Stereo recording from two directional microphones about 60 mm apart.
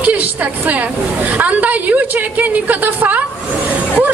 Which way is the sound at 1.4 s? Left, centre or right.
Right.